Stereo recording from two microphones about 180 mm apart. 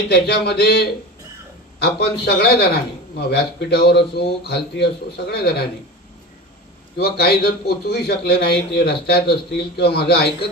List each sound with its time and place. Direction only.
0.1 s a man's voice: 65° left (ahead or behind)
7.0 s a man's voice: 60° left (ahead or behind)